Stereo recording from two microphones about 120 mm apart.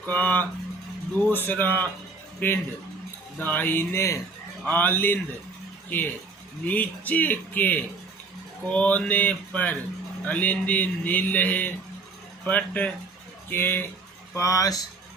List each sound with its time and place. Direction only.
0.0 s speech: 15° left (ahead or behind)
6.7 s speech: 15° left (ahead or behind); by 14.8 s 30° left (ahead or behind)